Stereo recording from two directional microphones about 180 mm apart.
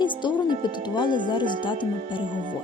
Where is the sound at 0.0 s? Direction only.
25° left (ahead or behind).